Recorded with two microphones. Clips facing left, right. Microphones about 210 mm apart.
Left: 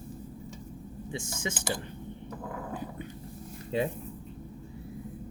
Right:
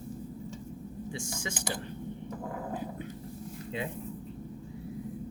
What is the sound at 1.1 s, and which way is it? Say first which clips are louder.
Speech: left 5 dB; 20° left (ahead or behind).